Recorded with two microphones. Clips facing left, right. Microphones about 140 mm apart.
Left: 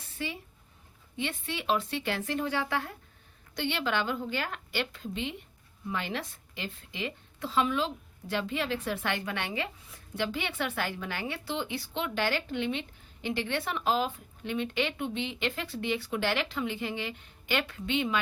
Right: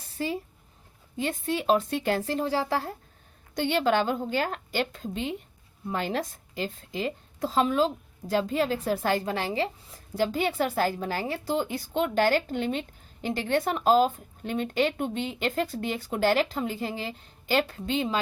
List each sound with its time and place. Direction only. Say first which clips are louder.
0.2 s a woman's voice: right 7 dB; 40° right (ahead or behind)
3.5 s a woman's voice: right 7 dB; 45° right (ahead or behind)